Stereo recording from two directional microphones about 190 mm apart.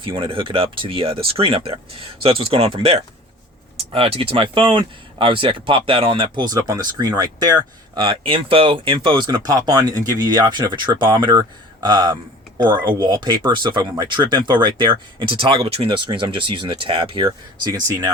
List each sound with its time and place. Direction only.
0.0 s speech: 25° right (ahead or behind)